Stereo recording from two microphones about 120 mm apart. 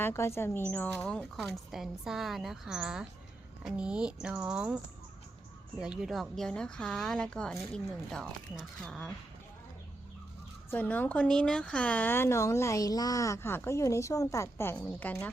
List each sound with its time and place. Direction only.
0.0 s a woman's voice: 20° left (ahead or behind)
0.7 s speech: 10° left (ahead or behind); by 4.8 s 10° right (ahead or behind)
5.8 s speech: 5° right (ahead or behind)
10.7 s a woman's voice: 15° left (ahead or behind)